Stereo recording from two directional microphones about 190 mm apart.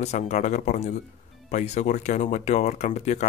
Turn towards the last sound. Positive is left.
turn(degrees=35)  # may be behind; listen again after turning